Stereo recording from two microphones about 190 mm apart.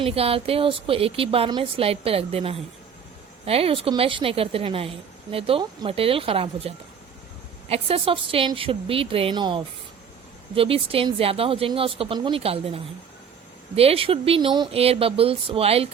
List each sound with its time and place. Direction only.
0.0 s a woman's voice: 30° right (ahead or behind)